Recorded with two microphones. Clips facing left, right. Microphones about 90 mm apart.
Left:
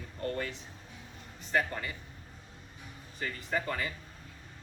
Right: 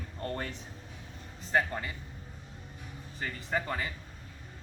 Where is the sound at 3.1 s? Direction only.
25° right (ahead or behind).